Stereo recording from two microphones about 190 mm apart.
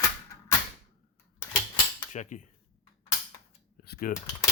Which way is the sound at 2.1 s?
40° left (ahead or behind).